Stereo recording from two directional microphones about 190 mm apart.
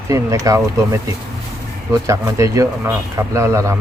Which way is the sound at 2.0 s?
15° right (ahead or behind).